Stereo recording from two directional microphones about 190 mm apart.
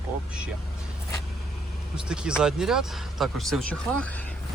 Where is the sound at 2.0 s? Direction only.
5° right (ahead or behind).